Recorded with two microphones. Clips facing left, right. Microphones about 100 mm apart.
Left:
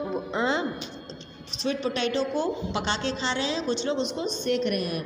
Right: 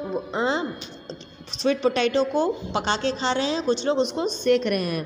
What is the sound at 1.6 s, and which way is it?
Speech, 70° right (ahead or behind).